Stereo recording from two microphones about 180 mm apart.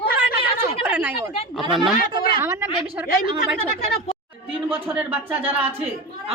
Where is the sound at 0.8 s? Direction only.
10° right (ahead or behind).